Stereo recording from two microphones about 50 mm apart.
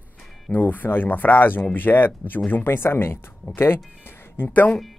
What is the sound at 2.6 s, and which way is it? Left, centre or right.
Speech, left.